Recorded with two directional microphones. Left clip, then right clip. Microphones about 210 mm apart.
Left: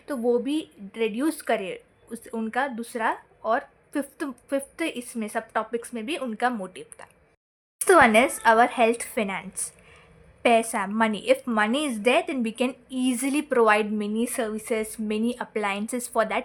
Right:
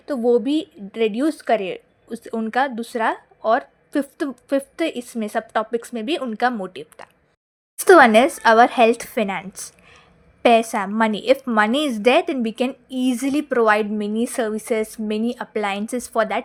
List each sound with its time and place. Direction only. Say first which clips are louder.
0.0 s a woman's voice: right 6 dB; 20° right (ahead or behind)